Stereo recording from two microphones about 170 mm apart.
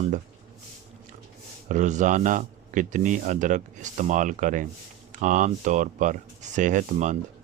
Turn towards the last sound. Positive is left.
turn(degrees=-50)  # may be behind; listen again after turning